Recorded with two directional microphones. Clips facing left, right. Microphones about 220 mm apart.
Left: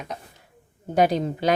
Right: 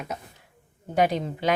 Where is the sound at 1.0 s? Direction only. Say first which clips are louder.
Left 3 dB; 40° left (ahead or behind).